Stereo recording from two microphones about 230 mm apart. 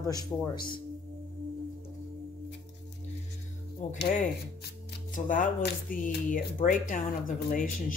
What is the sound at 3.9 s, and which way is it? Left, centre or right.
Speech, left.